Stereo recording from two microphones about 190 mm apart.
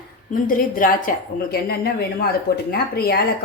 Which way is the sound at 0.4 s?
45° left (ahead or behind).